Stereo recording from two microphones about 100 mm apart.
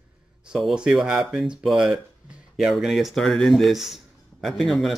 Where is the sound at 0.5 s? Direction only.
5° right (ahead or behind).